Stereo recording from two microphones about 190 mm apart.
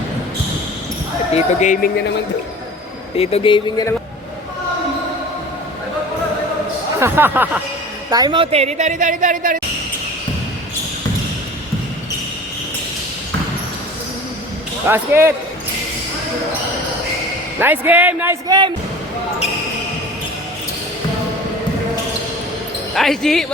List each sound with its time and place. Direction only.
1.3 s speech: 35° left (ahead or behind)
3.2 s speech: 30° left (ahead or behind)
7.0 s a man's voice: 10° right (ahead or behind)
8.1 s a woman's voice: 20° right (ahead or behind); by 9.6 s 45° right (ahead or behind)
14.8 s a man's voice: 10° right (ahead or behind)
17.6 s a man's voice: 10° right (ahead or behind)
18.4 s speech: 20° right (ahead or behind)
23.0 s speech: centre (ahead or behind)